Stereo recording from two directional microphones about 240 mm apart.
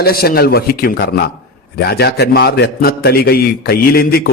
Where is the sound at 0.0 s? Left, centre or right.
Left.